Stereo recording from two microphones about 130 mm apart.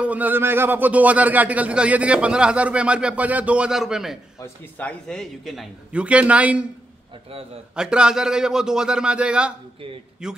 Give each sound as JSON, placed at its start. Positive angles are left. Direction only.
{"t": 0.0, "sound": "a man's voice", "side_deg": -10}
{"t": 4.4, "sound": "a man's voice", "side_deg": 10}
{"t": 7.7, "sound": "a man's voice", "side_deg": -5}